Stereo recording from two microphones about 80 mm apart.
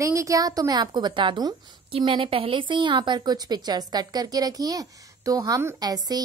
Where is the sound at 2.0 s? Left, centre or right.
Right.